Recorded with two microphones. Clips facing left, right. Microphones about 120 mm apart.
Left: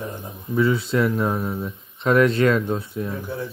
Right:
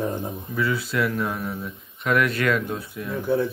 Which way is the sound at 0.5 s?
25° left (ahead or behind).